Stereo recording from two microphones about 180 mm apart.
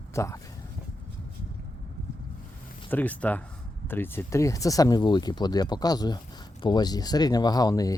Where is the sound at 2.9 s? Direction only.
10° left (ahead or behind).